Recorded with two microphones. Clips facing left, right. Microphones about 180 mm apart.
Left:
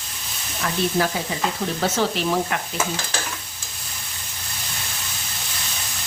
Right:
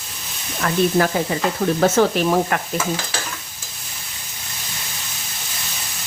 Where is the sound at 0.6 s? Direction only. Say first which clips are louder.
Right 5 dB; 55° right (ahead or behind).